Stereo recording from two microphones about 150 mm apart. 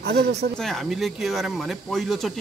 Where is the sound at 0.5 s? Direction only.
Centre (ahead or behind).